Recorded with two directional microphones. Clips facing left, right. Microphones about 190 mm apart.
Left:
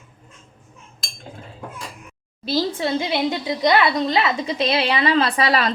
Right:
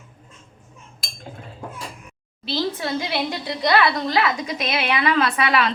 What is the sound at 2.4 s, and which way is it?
Speech, 45° left (ahead or behind).